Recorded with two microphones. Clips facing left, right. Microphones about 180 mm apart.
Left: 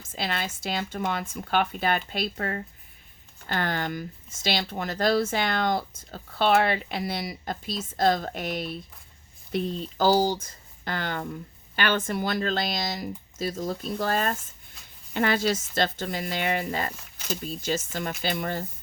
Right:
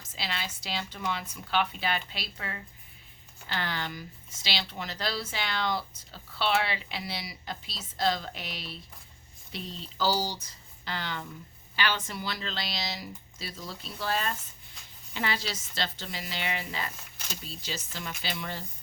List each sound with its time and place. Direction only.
0.2 s speech: 50° left (ahead or behind)